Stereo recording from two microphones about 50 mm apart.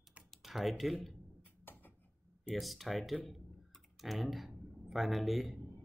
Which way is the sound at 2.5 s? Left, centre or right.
Centre.